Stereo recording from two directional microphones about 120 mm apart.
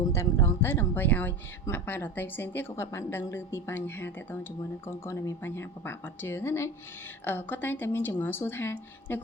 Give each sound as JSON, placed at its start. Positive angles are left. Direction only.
{"t": 0.0, "sound": "a woman's voice", "side_deg": 25}